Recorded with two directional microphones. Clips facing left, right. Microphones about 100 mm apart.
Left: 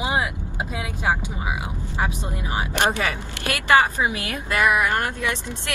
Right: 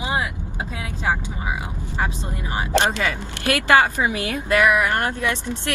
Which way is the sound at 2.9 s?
20° left (ahead or behind).